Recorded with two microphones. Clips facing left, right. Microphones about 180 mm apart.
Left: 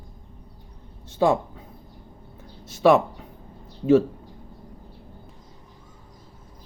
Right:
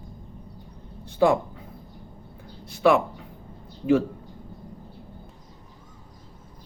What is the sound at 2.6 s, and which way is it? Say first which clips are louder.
Speech: left 2 dB; 20° left (ahead or behind).